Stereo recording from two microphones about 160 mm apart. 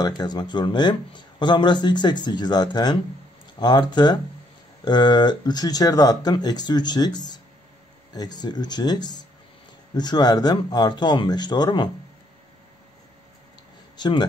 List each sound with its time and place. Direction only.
0.0 s speech: 25° left (ahead or behind)
13.9 s speech: 25° left (ahead or behind)